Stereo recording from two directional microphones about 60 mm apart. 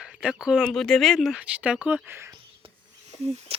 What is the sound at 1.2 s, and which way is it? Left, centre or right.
Speech, centre.